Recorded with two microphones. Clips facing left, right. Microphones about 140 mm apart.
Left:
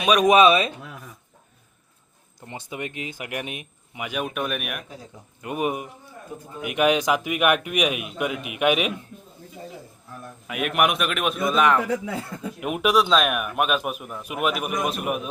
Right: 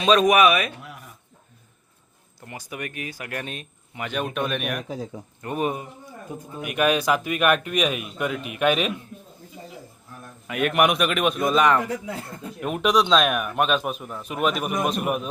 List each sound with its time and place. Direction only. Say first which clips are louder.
0.0 s speech: right 2 dB; 10° left (ahead or behind)
0.3 s speech: left 2 dB; 25° left (ahead or behind)
2.5 s speech: left 1 dB; 25° left (ahead or behind)
10.4 s a man's voice: right 2 dB; 5° left (ahead or behind)